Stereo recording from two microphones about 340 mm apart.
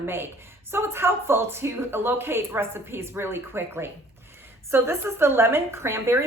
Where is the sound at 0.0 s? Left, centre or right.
Centre.